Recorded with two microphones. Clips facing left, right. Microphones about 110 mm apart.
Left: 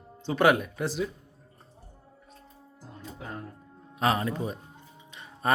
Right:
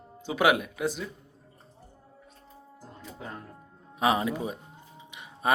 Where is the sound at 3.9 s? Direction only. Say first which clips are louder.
Right 1 dB; 15° right (ahead or behind).